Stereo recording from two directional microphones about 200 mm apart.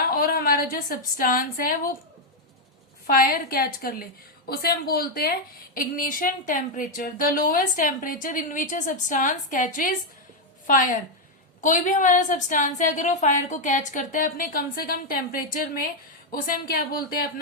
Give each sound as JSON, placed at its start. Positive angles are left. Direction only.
{"t": 0.2, "sound": "a woman's voice", "side_deg": 50}
{"t": 3.1, "sound": "a woman's voice", "side_deg": 45}